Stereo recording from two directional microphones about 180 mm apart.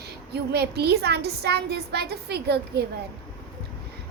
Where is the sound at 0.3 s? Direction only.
65° right (ahead or behind).